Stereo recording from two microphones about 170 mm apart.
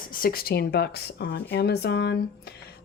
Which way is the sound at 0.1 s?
60° left (ahead or behind).